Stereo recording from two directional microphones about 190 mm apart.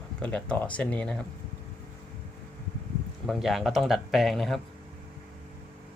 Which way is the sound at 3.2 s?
Centre (ahead or behind).